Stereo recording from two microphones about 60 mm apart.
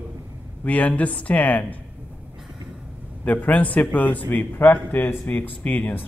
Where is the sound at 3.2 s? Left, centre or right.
Left.